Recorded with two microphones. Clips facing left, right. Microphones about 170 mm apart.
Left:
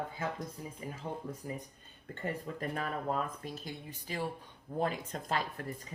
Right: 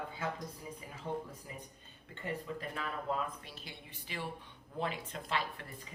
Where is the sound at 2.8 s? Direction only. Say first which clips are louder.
Left 2 dB; 45° left (ahead or behind).